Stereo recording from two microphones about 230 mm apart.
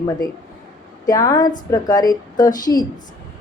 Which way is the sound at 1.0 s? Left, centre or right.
Centre.